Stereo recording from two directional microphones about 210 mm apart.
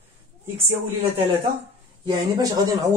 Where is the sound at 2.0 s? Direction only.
20° right (ahead or behind).